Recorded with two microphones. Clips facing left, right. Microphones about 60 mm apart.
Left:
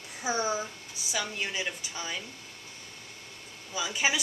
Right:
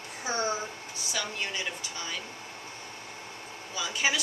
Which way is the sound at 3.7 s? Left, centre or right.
Centre.